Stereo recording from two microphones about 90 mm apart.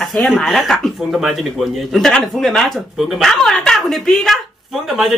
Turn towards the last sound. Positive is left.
turn(degrees=0)  # may be behind; listen again after turning